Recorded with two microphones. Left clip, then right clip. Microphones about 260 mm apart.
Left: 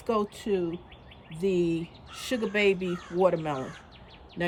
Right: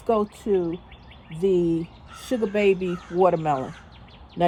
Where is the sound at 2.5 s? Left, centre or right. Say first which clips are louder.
Right 3 dB; centre.